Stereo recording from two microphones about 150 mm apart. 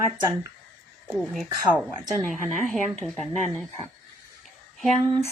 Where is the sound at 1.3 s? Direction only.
Centre (ahead or behind).